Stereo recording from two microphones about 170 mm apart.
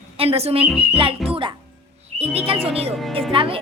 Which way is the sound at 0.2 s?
35° right (ahead or behind).